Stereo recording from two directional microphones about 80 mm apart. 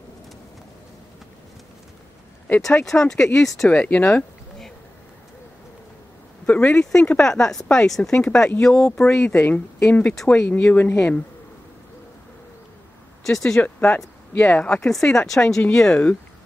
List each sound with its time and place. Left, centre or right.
2.6 s speech: centre
6.4 s speech: centre
10.6 s speech: left
13.2 s speech: centre
13.6 s speech: centre
14.8 s speech: centre